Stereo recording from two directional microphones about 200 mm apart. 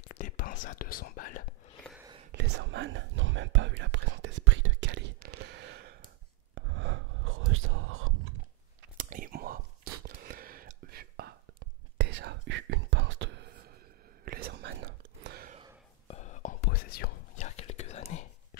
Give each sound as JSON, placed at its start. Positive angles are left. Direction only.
{"t": 0.1, "sound": "whispering", "side_deg": 45}
{"t": 2.3, "sound": "whispering", "side_deg": -60}
{"t": 8.9, "sound": "whispering", "side_deg": -45}
{"t": 16.1, "sound": "whispering", "side_deg": 35}
{"t": 16.6, "sound": "whispering", "side_deg": 50}
{"t": 17.4, "sound": "whispering", "side_deg": 35}